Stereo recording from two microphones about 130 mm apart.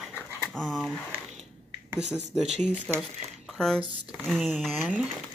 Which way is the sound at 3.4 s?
5° left (ahead or behind).